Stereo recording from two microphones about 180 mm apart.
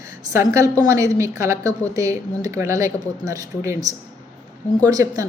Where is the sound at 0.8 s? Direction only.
15° right (ahead or behind).